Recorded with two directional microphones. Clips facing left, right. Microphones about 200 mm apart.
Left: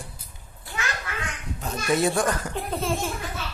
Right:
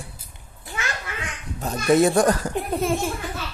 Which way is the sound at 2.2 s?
40° right (ahead or behind).